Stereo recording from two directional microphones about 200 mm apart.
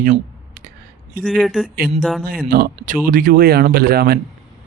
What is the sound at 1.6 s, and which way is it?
Speech, 45° right (ahead or behind).